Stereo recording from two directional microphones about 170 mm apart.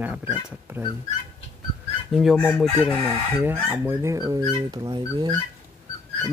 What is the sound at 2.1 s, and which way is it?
Speech, centre (ahead or behind).